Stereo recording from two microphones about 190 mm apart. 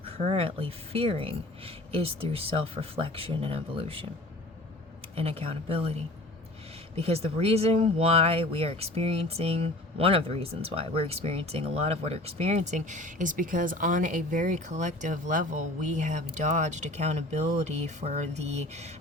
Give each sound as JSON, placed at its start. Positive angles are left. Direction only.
{"t": 0.0, "sound": "speech", "side_deg": -30}
{"t": 5.1, "sound": "speech", "side_deg": -30}